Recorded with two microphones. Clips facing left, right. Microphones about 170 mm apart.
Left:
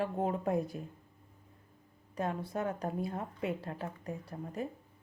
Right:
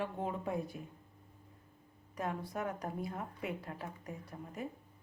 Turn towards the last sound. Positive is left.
turn(degrees=30)  # may be behind; listen again after turning